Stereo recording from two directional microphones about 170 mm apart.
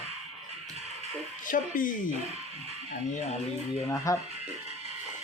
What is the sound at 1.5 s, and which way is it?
Speech, 55° left (ahead or behind).